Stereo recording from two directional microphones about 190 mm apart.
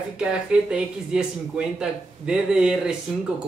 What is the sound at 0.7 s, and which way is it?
A man's voice, 5° right (ahead or behind).